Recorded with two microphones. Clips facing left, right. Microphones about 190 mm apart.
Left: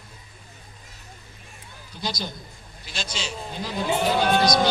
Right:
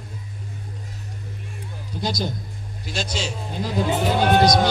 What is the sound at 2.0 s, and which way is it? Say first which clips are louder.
A man's voice: right 5 dB; 45° right (ahead or behind).